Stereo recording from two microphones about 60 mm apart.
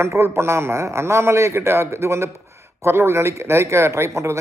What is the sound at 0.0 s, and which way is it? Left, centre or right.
A man's voice, right.